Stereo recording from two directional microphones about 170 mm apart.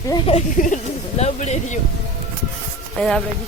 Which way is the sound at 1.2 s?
40° left (ahead or behind).